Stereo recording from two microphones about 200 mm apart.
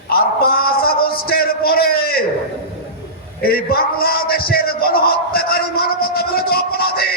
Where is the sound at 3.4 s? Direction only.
50° left (ahead or behind).